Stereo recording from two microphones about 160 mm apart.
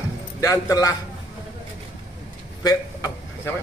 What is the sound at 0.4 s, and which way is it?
Speech, 20° left (ahead or behind).